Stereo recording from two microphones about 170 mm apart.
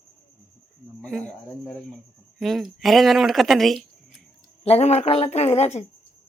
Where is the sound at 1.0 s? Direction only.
5° left (ahead or behind).